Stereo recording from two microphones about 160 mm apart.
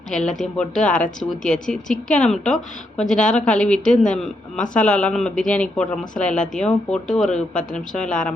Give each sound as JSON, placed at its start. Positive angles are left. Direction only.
{"t": 0.1, "sound": "speech", "side_deg": 5}